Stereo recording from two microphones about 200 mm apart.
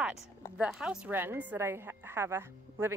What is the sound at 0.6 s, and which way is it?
A woman's voice, 5° right (ahead or behind).